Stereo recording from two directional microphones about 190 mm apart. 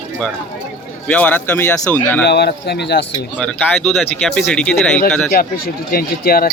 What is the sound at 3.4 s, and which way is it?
Speech, 5° left (ahead or behind).